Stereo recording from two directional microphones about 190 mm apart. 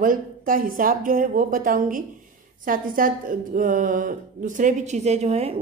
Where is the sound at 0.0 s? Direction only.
45° right (ahead or behind).